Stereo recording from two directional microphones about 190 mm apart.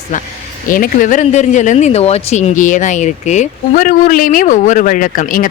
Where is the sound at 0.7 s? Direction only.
45° left (ahead or behind).